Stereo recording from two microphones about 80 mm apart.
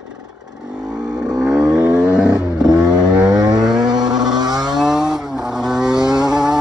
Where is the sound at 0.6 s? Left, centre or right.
Centre.